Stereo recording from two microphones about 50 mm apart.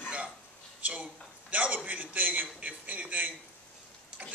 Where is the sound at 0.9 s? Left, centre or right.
Right.